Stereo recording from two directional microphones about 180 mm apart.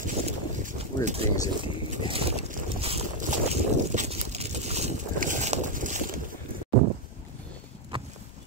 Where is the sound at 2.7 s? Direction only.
35° right (ahead or behind).